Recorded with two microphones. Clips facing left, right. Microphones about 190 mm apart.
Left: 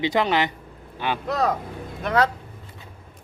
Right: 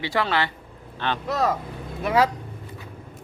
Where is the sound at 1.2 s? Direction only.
Centre (ahead or behind).